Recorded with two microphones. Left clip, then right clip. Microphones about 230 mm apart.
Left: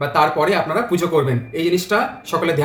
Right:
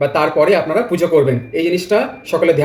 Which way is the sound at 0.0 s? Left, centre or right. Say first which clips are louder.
Right 3 dB; centre.